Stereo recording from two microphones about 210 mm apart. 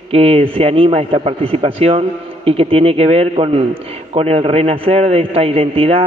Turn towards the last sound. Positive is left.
turn(degrees=-25)  # may be behind; listen again after turning